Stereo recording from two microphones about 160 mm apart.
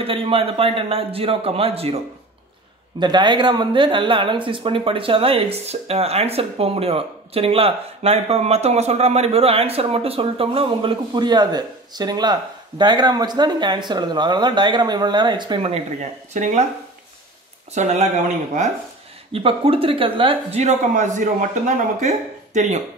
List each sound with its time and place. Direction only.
0.0 s speech: 35° right (ahead or behind)
3.0 s speech: 30° right (ahead or behind); by 16.6 s 45° right (ahead or behind)
17.7 s speech: 45° right (ahead or behind)
19.3 s speech: 35° right (ahead or behind)